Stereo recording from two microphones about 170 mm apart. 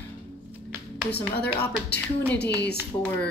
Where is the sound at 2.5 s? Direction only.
75° left (ahead or behind).